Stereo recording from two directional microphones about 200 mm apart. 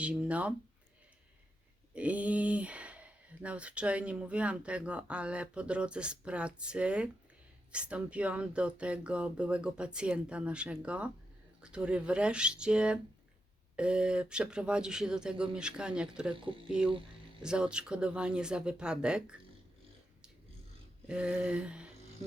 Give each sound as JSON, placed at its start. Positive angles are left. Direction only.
{"t": 0.0, "sound": "speech", "side_deg": -5}
{"t": 1.9, "sound": "speech", "side_deg": -5}
{"t": 16.3, "sound": "speech", "side_deg": -25}
{"t": 16.6, "sound": "speech", "side_deg": -5}
{"t": 21.1, "sound": "speech", "side_deg": -5}